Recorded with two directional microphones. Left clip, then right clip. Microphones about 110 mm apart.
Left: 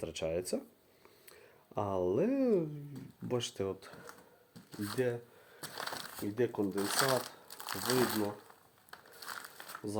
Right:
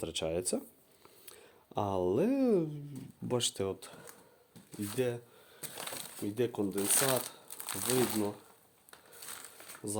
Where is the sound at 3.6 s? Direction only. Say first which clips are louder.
Right 1 dB; 45° right (ahead or behind).